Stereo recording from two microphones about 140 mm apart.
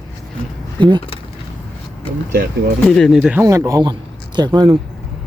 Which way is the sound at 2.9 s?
5° left (ahead or behind).